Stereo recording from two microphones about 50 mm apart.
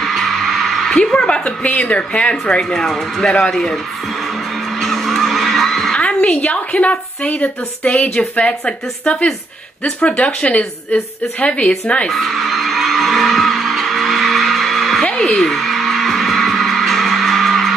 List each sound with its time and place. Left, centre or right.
0.0 s music: centre
0.8 s a woman's voice: centre
2.7 s speech: centre
4.8 s vehicle: centre
5.9 s a woman's voice: left
12.1 s music: centre